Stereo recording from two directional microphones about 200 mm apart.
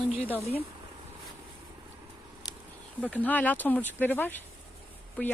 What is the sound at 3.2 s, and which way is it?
Speech, 10° left (ahead or behind).